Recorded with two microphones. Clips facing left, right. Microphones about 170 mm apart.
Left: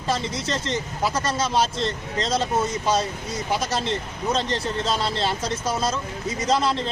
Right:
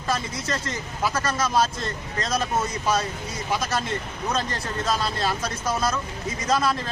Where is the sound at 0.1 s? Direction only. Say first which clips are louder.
Left 2 dB; 25° left (ahead or behind).